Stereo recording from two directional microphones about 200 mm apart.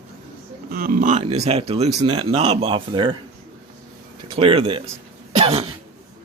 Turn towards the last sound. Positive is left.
turn(degrees=-30)  # may be behind; listen again after turning